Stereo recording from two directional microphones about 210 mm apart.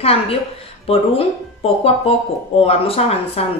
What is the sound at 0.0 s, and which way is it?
A woman's voice, 30° left (ahead or behind).